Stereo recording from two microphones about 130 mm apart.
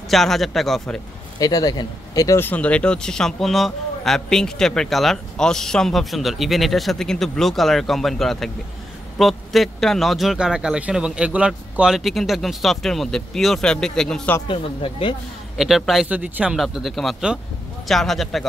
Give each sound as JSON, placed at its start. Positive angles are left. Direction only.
{"t": 0.1, "sound": "a man's voice", "side_deg": 0}
{"t": 1.4, "sound": "speech", "side_deg": 30}
{"t": 2.4, "sound": "a man's voice", "side_deg": 10}
{"t": 14.5, "sound": "speech", "side_deg": 45}
{"t": 15.5, "sound": "a man's voice", "side_deg": 0}